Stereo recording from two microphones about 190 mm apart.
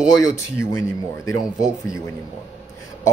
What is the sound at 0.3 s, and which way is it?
Speech, 15° left (ahead or behind).